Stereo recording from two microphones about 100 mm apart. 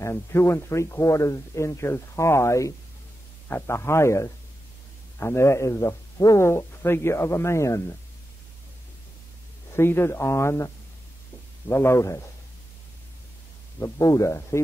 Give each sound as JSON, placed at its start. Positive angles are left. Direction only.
{"t": 0.0, "sound": "speech", "side_deg": 25}
{"t": 9.8, "sound": "speech", "side_deg": 25}
{"t": 13.7, "sound": "speech", "side_deg": 30}